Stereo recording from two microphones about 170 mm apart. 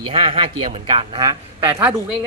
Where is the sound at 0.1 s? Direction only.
30° right (ahead or behind).